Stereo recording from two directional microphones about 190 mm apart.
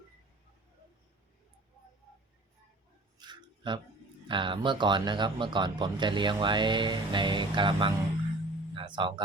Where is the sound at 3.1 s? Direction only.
25° right (ahead or behind).